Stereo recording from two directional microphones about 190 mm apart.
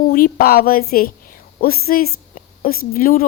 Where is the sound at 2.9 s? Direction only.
45° left (ahead or behind).